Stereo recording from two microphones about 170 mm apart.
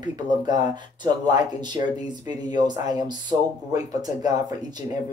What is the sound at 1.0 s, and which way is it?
Speech, 25° right (ahead or behind).